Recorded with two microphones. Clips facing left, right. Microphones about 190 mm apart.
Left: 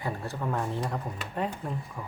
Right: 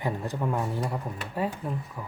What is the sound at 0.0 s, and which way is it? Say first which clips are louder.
Speech: right 3 dB; 15° right (ahead or behind).